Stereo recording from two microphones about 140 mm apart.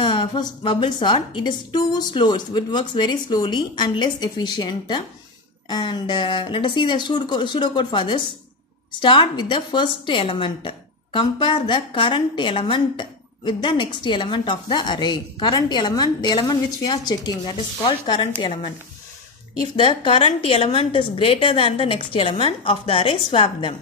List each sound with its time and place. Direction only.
0.0 s a woman's voice: 35° left (ahead or behind)
19.8 s a woman's voice: 40° left (ahead or behind)